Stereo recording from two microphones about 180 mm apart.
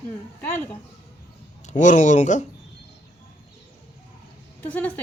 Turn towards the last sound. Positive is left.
turn(degrees=10)  # may be behind; listen again after turning